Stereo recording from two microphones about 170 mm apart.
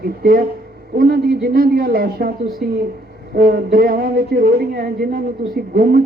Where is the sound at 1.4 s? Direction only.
60° right (ahead or behind).